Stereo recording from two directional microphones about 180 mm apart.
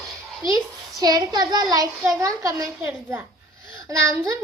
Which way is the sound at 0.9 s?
20° right (ahead or behind).